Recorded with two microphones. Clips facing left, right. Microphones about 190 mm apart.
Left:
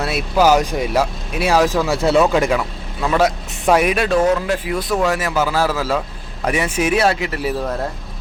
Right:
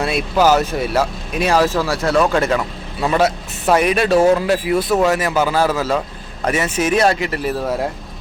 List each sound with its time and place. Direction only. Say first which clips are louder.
0.0 s speech: even; 5° left (ahead or behind)
1.9 s speech: left 2 dB; 20° left (ahead or behind)
2.1 s speech: even; 10° left (ahead or behind)
3.0 s a man's voice: right 1 dB; 10° right (ahead or behind)
3.8 s a man's voice: right 4 dB; 5° left (ahead or behind)